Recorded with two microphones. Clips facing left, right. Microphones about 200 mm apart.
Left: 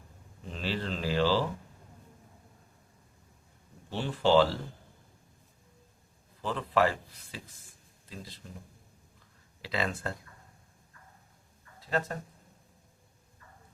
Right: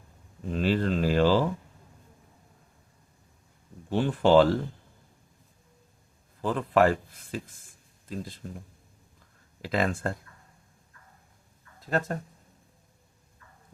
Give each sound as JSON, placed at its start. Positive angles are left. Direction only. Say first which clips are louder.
{"t": 0.5, "sound": "a sound", "louder": "right 9 dB", "side_deg": -50}
{"t": 3.8, "sound": "speech", "louder": "right 5 dB", "side_deg": -50}
{"t": 6.4, "sound": "speech", "louder": "right 5 dB", "side_deg": -50}
{"t": 9.6, "sound": "speech", "louder": "right 6 dB", "side_deg": -50}
{"t": 11.8, "sound": "speech", "louder": "right 3 dB", "side_deg": -45}